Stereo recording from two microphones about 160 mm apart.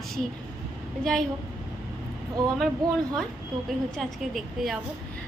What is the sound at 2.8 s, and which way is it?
Speech, 25° right (ahead or behind).